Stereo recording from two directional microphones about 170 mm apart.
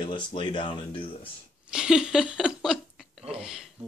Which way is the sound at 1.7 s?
5° right (ahead or behind).